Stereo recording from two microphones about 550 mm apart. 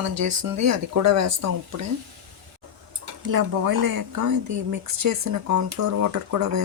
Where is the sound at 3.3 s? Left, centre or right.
Right.